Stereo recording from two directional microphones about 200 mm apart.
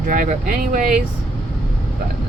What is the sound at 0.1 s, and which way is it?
Speech, 45° right (ahead or behind).